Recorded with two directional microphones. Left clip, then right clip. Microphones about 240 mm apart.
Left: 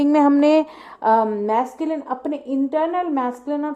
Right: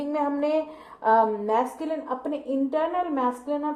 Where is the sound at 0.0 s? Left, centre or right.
Left.